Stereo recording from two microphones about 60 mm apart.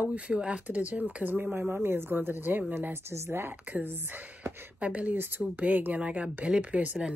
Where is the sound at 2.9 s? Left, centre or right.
Right.